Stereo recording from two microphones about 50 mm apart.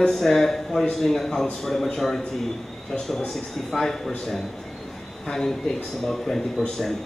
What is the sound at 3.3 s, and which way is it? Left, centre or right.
Speech, centre.